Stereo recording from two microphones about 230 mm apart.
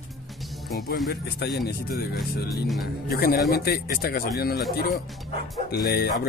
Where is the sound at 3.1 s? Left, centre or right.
Left.